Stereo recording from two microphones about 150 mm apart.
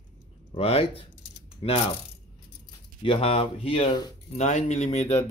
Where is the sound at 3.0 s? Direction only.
40° left (ahead or behind).